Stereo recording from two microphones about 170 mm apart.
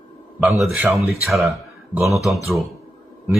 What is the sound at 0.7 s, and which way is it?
Speech, 5° right (ahead or behind).